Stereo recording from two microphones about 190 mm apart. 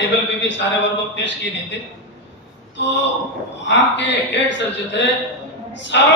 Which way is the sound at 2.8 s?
65° left (ahead or behind).